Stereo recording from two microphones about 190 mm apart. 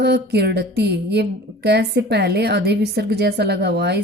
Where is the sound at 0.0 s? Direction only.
60° right (ahead or behind).